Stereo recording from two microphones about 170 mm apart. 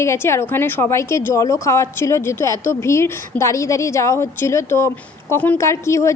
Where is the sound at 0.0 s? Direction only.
15° left (ahead or behind).